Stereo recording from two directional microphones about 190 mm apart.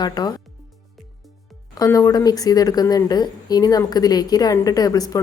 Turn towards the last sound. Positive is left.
turn(degrees=20)  # may be behind; listen again after turning